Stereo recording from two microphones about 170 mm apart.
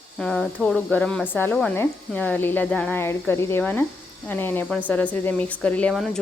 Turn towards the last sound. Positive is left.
turn(degrees=0)  # may be behind; listen again after turning